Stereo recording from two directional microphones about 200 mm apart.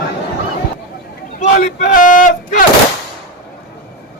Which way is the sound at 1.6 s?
45° left (ahead or behind).